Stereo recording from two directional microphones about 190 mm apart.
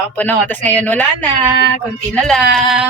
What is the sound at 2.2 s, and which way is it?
Speech, centre (ahead or behind).